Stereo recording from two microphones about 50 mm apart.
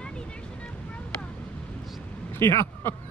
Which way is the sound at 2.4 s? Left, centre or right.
Left.